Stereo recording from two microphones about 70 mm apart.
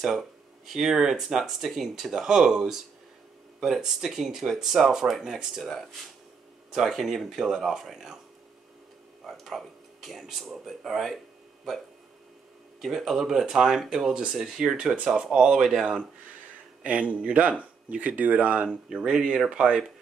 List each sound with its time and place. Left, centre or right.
0.7 s speech: centre
9.2 s speech: centre
12.8 s speech: centre
16.8 s speech: right